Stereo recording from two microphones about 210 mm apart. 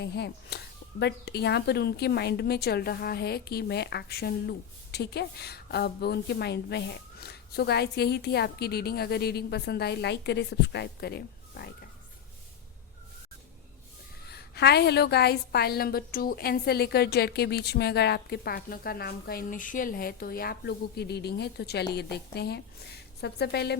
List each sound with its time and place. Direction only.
0.0 s speech: 55° left (ahead or behind)
14.3 s speech: 50° left (ahead or behind)